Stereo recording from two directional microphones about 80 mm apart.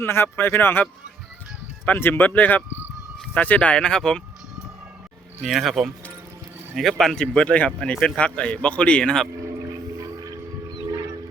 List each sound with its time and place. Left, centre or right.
0.0 s speech: left
2.0 s speech: left; by 4.2 s centre
5.4 s speech: centre
7.0 s speech: centre
10.0 s music: right